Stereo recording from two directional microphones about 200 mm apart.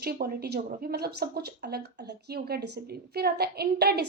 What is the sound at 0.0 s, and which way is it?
A woman's voice, 50° right (ahead or behind).